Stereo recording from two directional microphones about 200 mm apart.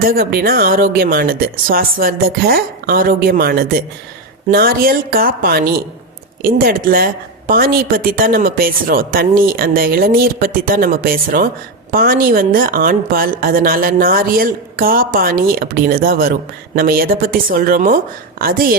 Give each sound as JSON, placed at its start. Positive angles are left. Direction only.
{"t": 0.2, "sound": "a woman's voice", "side_deg": -50}